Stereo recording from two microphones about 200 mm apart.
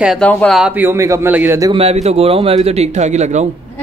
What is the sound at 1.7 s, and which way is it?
A man's voice, 30° right (ahead or behind).